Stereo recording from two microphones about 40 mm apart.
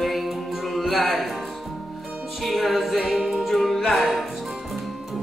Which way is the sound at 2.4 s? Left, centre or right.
Centre.